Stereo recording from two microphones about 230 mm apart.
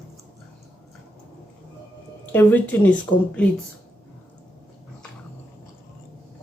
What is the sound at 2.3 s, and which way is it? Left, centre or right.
Speech, centre.